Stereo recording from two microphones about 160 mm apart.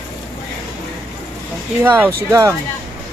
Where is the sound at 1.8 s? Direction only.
10° right (ahead or behind).